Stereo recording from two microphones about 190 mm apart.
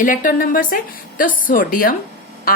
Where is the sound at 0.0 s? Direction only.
45° left (ahead or behind).